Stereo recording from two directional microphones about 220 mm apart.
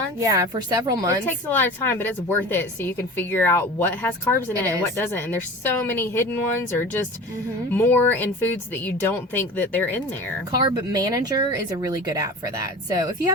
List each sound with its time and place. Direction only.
0.2 s speech: 15° right (ahead or behind)
1.3 s a woman's voice: 10° left (ahead or behind)
10.5 s speech: 20° right (ahead or behind)